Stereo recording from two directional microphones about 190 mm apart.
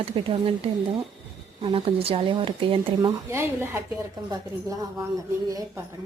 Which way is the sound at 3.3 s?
15° right (ahead or behind).